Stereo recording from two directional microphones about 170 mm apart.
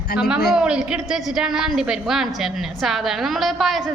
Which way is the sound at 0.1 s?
60° left (ahead or behind).